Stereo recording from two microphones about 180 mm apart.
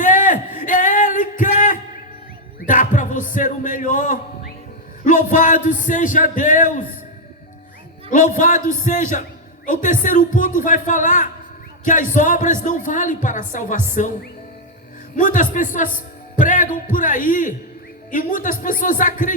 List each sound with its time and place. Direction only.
0.0 s a sound: 45° left (ahead or behind)
2.6 s music: 45° left (ahead or behind)
5.0 s a man's voice: 45° left (ahead or behind)
8.4 s a man's voice: 45° left (ahead or behind)
15.1 s a man's voice: 45° left (ahead or behind)